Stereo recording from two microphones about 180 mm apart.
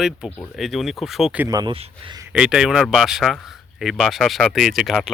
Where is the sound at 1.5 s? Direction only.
25° right (ahead or behind).